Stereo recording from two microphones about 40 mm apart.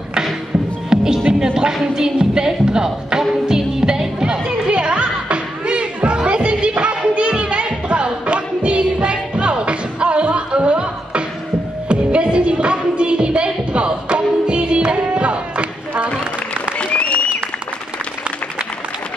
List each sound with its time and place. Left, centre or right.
0.8 s music: centre
1.7 s speech: centre
3.4 s music: centre
16.7 s applause: left